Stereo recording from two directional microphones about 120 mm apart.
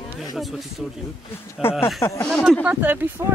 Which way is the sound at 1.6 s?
20° left (ahead or behind).